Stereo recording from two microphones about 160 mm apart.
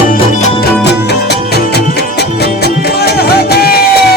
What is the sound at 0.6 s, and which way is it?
Music, 90° left.